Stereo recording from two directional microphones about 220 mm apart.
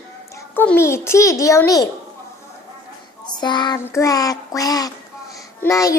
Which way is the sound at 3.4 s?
20° left (ahead or behind).